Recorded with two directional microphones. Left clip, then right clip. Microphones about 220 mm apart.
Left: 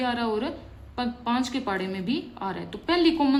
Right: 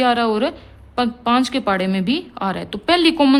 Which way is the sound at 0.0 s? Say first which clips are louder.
Right 10 dB; 45° right (ahead or behind).